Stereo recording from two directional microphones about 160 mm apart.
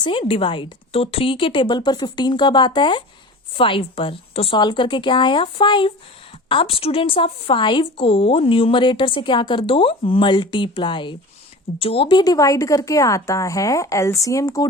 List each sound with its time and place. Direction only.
0.0 s a woman's voice: 35° left (ahead or behind)